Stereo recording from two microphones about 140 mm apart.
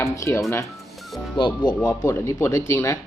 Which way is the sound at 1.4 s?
30° left (ahead or behind).